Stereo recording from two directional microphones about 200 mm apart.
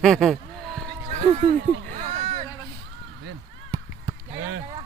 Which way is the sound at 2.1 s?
35° right (ahead or behind).